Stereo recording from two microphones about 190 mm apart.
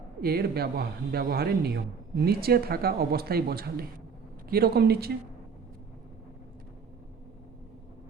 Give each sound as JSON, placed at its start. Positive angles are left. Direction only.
{"t": 0.2, "sound": "speech", "side_deg": -55}